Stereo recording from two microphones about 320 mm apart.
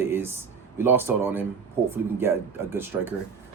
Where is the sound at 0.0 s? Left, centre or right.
Centre.